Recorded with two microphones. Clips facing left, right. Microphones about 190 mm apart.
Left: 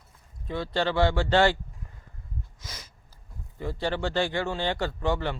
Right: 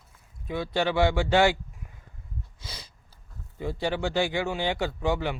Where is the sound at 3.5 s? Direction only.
15° right (ahead or behind).